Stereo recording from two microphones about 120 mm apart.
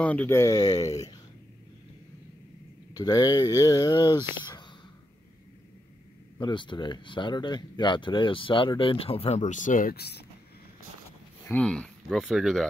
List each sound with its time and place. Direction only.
0.0 s speech: 10° left (ahead or behind)
2.9 s speech: 30° left (ahead or behind)
6.4 s speech: 40° left (ahead or behind); by 9.8 s 90° left
11.5 s speech: 10° left (ahead or behind)
12.1 s speech: centre (ahead or behind)